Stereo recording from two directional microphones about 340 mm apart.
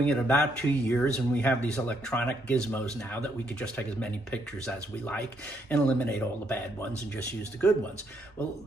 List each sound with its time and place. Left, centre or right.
0.0 s speech: centre